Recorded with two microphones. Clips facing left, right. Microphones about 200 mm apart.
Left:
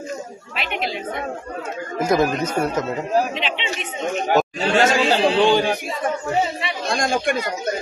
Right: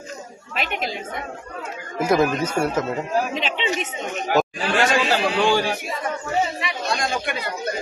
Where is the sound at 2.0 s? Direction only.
5° right (ahead or behind).